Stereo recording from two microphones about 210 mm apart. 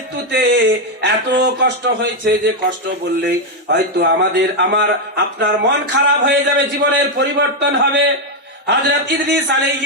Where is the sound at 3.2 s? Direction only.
50° right (ahead or behind).